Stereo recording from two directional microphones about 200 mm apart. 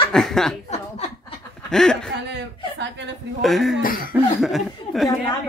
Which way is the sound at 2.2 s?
60° right (ahead or behind).